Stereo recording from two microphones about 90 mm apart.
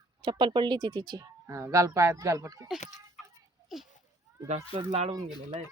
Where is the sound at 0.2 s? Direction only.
65° right (ahead or behind).